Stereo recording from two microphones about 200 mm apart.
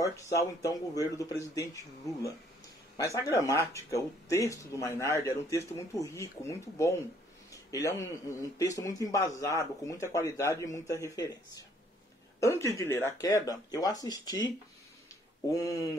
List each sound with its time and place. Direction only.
0.0 s speech: 15° left (ahead or behind)